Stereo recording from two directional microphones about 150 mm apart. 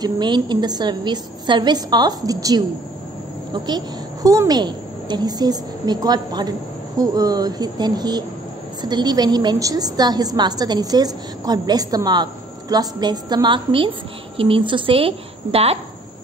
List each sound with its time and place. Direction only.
0.0 s a woman's voice: 30° right (ahead or behind)